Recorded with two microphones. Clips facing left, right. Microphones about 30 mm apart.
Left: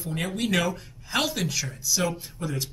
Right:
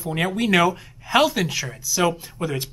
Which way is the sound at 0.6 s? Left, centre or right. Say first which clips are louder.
Right 7 dB; centre.